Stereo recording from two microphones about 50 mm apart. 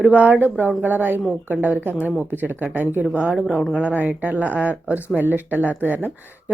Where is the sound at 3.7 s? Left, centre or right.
Right.